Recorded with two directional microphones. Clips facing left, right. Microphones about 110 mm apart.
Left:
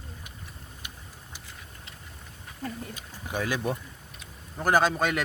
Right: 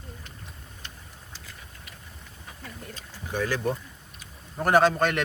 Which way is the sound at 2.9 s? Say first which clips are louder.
Right 1 dB; 15° left (ahead or behind).